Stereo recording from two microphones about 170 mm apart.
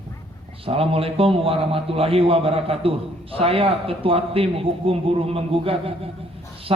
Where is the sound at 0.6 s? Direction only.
35° right (ahead or behind).